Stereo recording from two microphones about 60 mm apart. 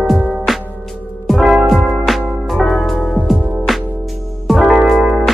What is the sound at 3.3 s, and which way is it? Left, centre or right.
Music, centre.